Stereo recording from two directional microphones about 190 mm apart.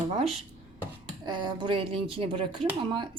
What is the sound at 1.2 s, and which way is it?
A woman's voice, 25° right (ahead or behind).